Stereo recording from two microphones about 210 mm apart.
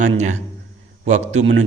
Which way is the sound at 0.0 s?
35° right (ahead or behind).